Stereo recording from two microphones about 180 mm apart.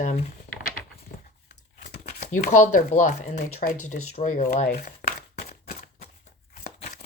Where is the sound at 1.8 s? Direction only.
55° left (ahead or behind); by 4.8 s 40° left (ahead or behind).